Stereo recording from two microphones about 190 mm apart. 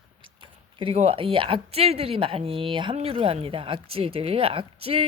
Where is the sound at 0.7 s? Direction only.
30° right (ahead or behind).